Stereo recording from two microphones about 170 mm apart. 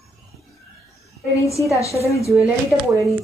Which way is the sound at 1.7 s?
20° left (ahead or behind).